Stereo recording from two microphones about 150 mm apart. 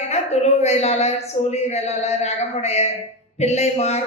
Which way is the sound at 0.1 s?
45° left (ahead or behind).